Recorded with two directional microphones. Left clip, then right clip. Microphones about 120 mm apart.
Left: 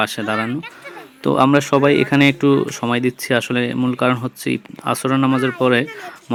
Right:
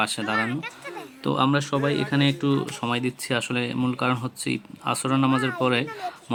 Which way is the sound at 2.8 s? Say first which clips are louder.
Left 5 dB; 20° left (ahead or behind).